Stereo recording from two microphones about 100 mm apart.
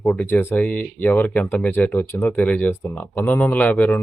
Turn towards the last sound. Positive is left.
turn(degrees=15)  # may be behind; listen again after turning